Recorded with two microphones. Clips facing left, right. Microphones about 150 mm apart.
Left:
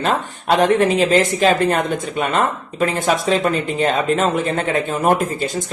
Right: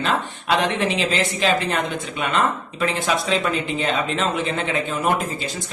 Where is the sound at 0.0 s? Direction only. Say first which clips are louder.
Left 3 dB; 45° left (ahead or behind).